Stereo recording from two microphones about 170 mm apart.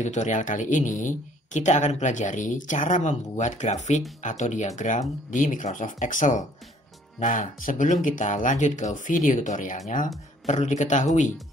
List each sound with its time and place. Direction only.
0.0 s speech: 45° left (ahead or behind)